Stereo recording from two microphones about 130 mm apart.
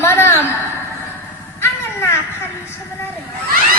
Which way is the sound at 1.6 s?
20° left (ahead or behind).